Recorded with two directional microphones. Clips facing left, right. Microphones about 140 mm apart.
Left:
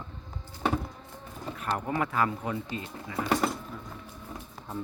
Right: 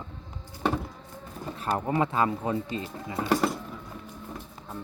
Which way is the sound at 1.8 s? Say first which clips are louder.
Right 3 dB; 25° right (ahead or behind).